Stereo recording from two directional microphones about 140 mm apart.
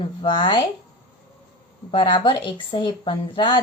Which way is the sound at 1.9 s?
35° left (ahead or behind).